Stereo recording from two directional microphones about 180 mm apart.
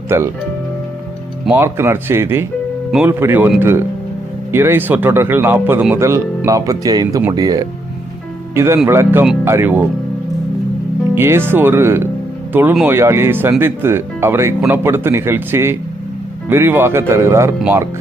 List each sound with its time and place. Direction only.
0.1 s speech: 15° right (ahead or behind)
1.5 s speech: 15° right (ahead or behind)
11.1 s speech: 15° right (ahead or behind)